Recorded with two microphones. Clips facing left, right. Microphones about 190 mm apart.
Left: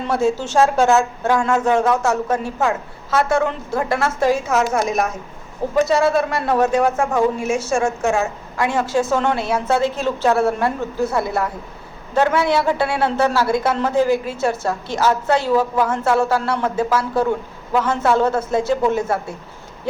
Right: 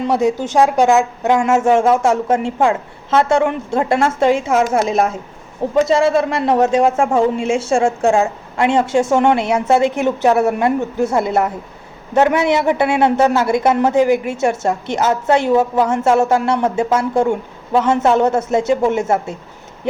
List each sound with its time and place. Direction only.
0.0 s a woman's voice: 15° right (ahead or behind)